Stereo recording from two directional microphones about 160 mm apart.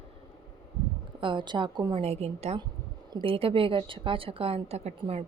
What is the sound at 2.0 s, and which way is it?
A woman's voice, 40° right (ahead or behind).